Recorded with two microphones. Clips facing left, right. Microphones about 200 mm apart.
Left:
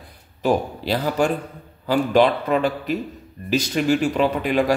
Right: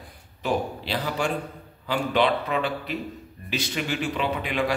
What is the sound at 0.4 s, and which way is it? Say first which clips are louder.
A man's voice: left 6 dB; 45° left (ahead or behind).